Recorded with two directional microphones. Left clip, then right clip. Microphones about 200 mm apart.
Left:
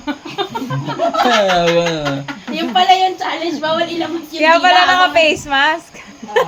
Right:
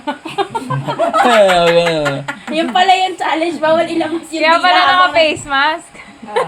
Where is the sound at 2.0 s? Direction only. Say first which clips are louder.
Right 3 dB; 50° right (ahead or behind).